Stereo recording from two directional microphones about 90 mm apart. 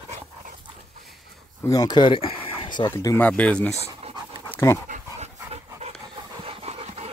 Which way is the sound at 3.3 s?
15° left (ahead or behind).